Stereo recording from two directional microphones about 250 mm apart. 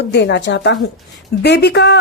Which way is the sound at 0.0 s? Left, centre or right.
Left.